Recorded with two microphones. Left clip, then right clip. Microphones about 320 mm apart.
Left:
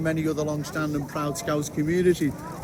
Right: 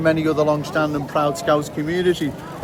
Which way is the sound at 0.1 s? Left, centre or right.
Centre.